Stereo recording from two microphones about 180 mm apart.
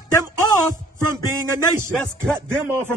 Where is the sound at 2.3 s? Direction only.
15° right (ahead or behind).